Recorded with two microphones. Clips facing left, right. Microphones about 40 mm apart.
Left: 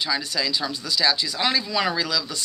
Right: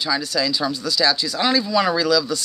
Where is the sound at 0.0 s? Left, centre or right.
Centre.